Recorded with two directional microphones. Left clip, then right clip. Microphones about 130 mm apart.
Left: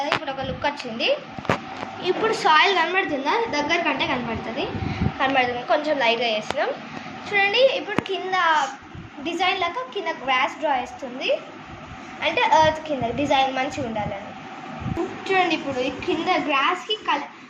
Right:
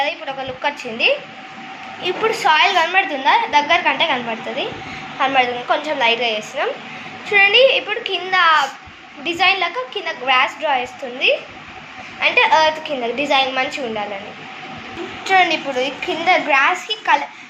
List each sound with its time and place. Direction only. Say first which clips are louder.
0.0 s a woman's voice: right 3 dB; 15° right (ahead or behind)
15.2 s a woman's voice: right 7 dB; 20° right (ahead or behind)